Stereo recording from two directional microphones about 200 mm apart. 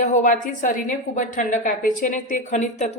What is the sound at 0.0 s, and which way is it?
A woman's voice, 40° left (ahead or behind).